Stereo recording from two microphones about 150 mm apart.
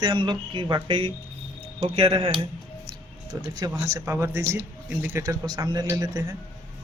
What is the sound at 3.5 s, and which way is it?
Speech, 25° right (ahead or behind).